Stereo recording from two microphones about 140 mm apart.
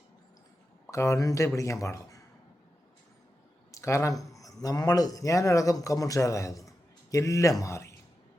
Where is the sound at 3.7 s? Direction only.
20° left (ahead or behind).